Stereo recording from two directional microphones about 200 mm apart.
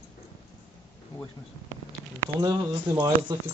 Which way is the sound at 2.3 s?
20° right (ahead or behind).